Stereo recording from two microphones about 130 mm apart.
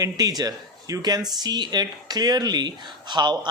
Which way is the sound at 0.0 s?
30° right (ahead or behind).